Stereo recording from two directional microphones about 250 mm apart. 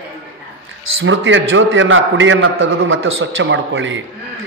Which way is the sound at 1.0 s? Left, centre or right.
Right.